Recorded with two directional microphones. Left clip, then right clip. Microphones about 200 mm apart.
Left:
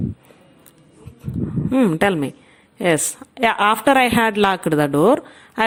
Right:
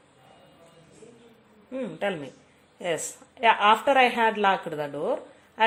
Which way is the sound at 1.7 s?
40° left (ahead or behind).